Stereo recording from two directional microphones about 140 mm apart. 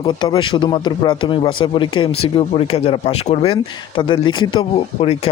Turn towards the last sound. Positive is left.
turn(degrees=45)  # may be behind; listen again after turning